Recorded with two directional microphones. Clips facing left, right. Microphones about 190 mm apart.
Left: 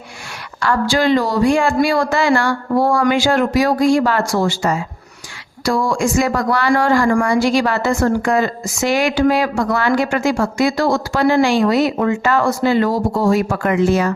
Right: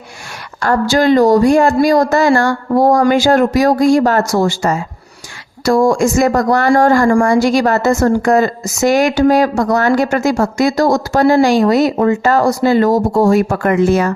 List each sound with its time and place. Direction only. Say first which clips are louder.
0.6 s speech: right 4 dB; 45° right (ahead or behind)